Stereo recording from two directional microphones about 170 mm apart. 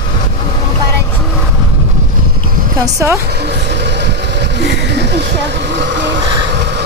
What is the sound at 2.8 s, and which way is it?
Speech, 15° right (ahead or behind).